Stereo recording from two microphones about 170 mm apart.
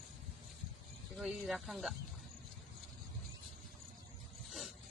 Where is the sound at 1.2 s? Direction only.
Centre (ahead or behind).